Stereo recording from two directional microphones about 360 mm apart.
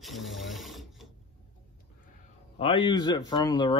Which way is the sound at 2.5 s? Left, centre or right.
Centre.